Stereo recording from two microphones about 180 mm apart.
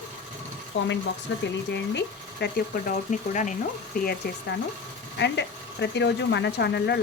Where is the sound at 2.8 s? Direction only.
45° left (ahead or behind).